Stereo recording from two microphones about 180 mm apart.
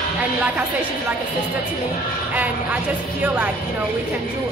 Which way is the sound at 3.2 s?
10° right (ahead or behind).